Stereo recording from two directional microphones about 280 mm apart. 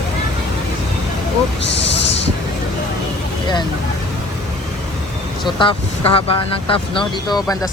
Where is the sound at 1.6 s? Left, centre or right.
Left.